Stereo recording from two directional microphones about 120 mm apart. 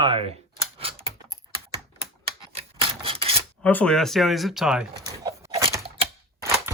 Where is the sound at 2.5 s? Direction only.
50° right (ahead or behind).